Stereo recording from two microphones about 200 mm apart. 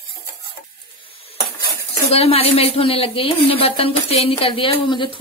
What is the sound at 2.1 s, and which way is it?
Speech, 30° left (ahead or behind).